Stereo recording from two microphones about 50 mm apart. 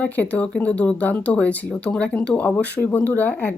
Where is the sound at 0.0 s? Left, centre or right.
Left.